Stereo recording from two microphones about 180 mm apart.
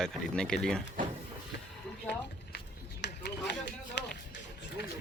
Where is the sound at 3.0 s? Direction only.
70° left (ahead or behind).